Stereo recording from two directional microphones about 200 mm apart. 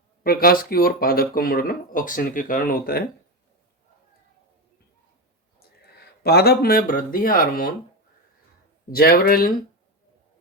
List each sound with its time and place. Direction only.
0.2 s speech: 50° left (ahead or behind)
5.8 s speech: 55° left (ahead or behind)
8.9 s speech: 50° left (ahead or behind)